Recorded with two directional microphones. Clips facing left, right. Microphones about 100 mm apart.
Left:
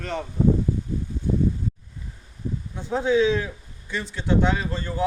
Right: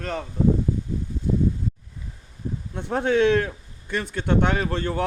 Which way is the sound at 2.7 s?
65° right (ahead or behind).